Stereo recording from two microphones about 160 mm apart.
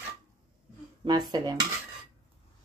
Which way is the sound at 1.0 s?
25° right (ahead or behind).